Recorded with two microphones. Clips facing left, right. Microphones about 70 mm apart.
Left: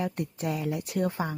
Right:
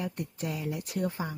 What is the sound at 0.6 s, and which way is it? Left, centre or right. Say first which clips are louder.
Speech: left 3 dB; left.